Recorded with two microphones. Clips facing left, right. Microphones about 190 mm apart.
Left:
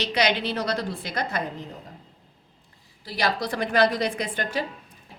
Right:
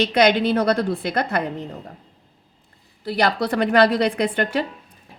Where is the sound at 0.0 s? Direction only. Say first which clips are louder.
Right 7 dB; 55° right (ahead or behind).